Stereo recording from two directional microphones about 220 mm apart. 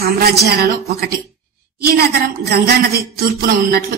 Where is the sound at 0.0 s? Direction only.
45° right (ahead or behind).